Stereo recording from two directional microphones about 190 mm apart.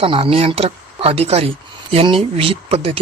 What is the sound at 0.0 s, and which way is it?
Speech, 30° right (ahead or behind).